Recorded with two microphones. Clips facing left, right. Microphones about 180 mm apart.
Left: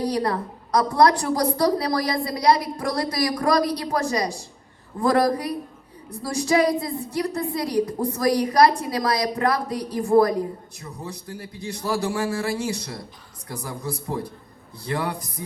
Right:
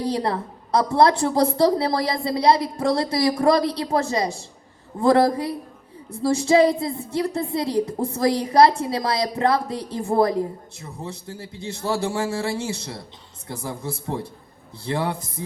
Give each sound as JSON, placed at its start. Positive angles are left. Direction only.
{"t": 0.0, "sound": "a woman's voice", "side_deg": -25}